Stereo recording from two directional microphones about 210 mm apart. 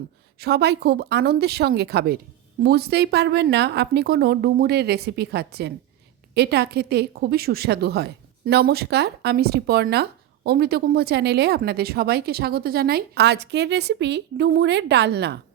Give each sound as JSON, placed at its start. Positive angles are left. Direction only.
{"t": 0.3, "sound": "speech", "side_deg": -50}